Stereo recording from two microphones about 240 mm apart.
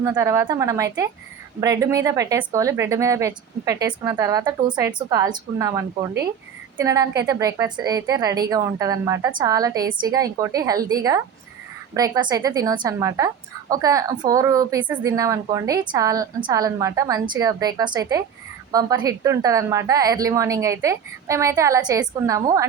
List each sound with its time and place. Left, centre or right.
0.0 s a woman's voice: centre